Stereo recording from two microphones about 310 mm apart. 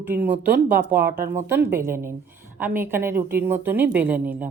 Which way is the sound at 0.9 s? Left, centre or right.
Centre.